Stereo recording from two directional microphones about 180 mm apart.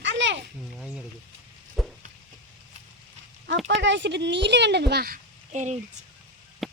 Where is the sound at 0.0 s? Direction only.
85° right.